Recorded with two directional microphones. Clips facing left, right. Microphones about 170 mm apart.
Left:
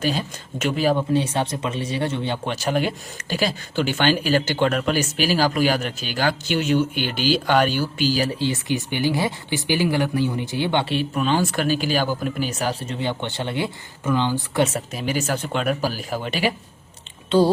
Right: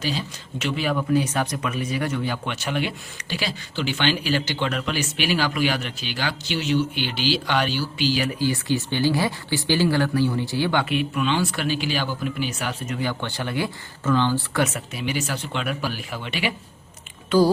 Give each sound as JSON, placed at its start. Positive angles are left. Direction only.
{"t": 0.0, "sound": "speech", "side_deg": 50}
{"t": 0.9, "sound": "speech", "side_deg": 30}
{"t": 8.4, "sound": "speech", "side_deg": 20}
{"t": 14.6, "sound": "speech", "side_deg": 35}
{"t": 17.2, "sound": "speech", "side_deg": 25}